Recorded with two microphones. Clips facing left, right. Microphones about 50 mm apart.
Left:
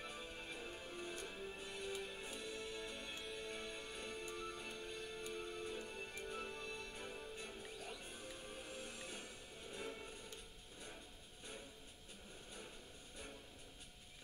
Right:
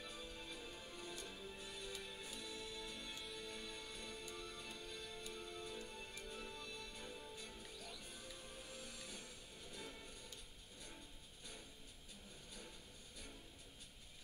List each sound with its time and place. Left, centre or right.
0.0 s music: left